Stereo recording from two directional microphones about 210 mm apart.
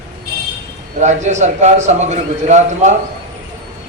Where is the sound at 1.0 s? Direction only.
35° right (ahead or behind).